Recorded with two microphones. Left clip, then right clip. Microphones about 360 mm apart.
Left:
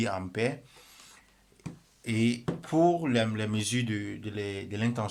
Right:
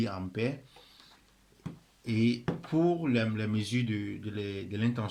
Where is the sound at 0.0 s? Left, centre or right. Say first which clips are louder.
Left 4 dB; left.